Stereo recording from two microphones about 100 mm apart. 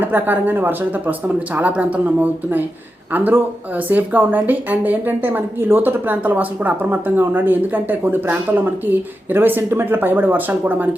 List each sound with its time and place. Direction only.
0.0 s a woman's voice: 20° right (ahead or behind)